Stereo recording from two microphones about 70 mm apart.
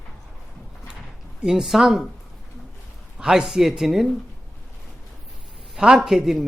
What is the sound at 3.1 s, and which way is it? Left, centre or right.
Speech, centre.